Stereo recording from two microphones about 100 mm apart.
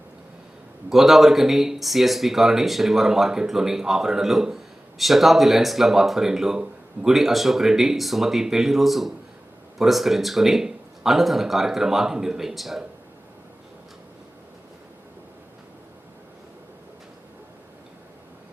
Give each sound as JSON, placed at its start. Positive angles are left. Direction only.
{"t": 0.9, "sound": "speech", "side_deg": 0}